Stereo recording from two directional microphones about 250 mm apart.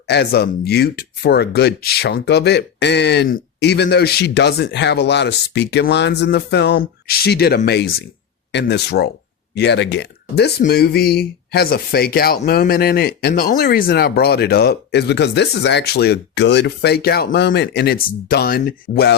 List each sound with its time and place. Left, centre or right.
0.1 s speech: left